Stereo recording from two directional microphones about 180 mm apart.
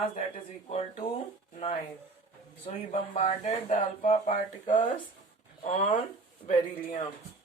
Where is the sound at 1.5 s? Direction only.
40° left (ahead or behind).